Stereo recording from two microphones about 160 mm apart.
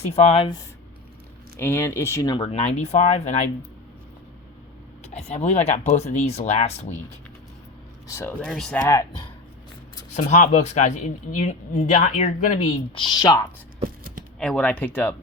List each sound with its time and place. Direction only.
0.1 s speech: 40° left (ahead or behind)
1.5 s speech: 15° left (ahead or behind)
2.5 s speech: 40° left (ahead or behind)
5.0 s speech: 45° left (ahead or behind)
8.0 s speech: 15° left (ahead or behind)
10.2 s speech: 45° left (ahead or behind)
12.9 s speech: 30° left (ahead or behind)
13.8 s a sound: 65° right (ahead or behind)
14.3 s speech: 5° left (ahead or behind)